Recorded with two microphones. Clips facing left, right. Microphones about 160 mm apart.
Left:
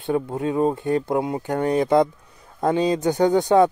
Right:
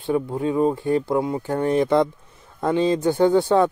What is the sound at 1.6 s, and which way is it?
Speech, 40° left (ahead or behind).